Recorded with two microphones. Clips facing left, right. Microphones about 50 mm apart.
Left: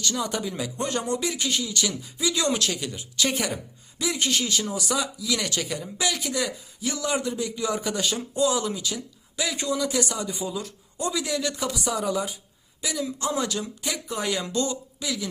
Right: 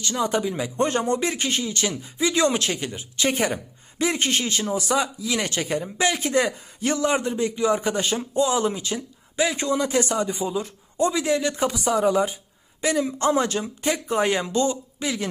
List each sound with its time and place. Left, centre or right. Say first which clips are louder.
0.0 s speech: right 4 dB; right
0.8 s a man's voice: right 5 dB; right
7.0 s a man's voice: right 3 dB; right
12.8 s a man's voice: right 7 dB; right